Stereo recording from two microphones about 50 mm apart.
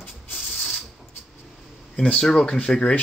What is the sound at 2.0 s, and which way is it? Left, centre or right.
Speech, left.